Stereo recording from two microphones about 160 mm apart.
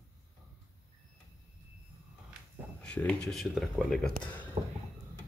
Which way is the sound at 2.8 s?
5° left (ahead or behind).